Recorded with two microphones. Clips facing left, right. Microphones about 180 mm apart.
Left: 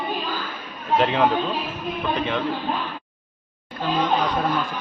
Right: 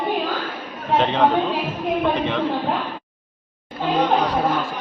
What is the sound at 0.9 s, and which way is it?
A man's voice, centre (ahead or behind).